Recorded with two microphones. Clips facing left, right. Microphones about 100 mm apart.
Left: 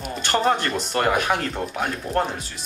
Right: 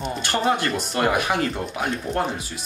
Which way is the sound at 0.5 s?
10° right (ahead or behind).